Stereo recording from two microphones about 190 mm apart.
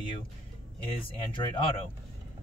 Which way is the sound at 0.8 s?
25° left (ahead or behind).